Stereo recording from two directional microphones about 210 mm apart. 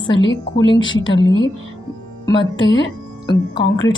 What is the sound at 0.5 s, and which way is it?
Speech, 20° left (ahead or behind).